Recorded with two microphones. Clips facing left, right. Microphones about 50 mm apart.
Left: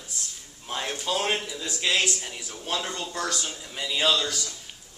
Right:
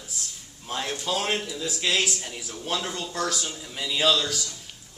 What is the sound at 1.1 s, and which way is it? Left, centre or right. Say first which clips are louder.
A man's voice: left 1 dB; centre.